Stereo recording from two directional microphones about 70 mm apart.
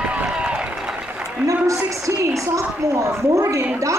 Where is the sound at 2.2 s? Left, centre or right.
Right.